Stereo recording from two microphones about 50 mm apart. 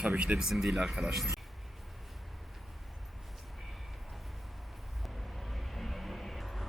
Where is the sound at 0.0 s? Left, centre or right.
Right.